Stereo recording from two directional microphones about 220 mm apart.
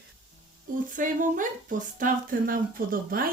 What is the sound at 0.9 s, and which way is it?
A woman's voice, 35° right (ahead or behind).